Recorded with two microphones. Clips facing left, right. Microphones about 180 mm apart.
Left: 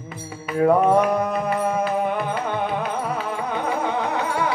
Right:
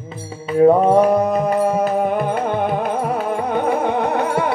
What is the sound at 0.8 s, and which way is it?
Music, 35° right (ahead or behind).